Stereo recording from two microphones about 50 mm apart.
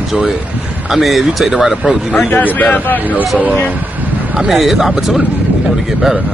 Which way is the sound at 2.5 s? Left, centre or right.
Left.